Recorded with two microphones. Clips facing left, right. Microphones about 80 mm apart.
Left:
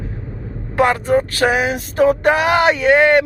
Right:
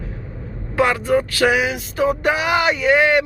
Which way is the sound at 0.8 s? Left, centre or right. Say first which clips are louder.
Left 2 dB; left.